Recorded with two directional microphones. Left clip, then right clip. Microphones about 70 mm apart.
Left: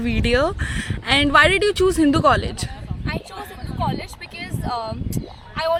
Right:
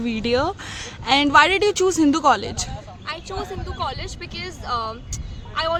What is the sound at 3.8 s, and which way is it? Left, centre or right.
Speech, centre.